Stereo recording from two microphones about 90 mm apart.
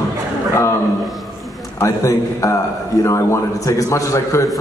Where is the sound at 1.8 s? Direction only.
35° left (ahead or behind).